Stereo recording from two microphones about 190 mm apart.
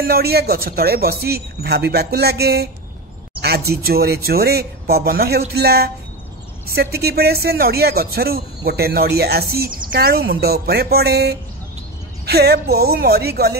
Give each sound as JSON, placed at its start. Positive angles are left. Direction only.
{"t": 0.0, "sound": "speech", "side_deg": -55}